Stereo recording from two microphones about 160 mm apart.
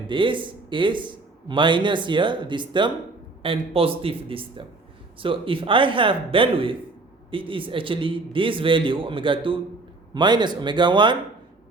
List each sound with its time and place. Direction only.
0.1 s a man's voice: 30° right (ahead or behind)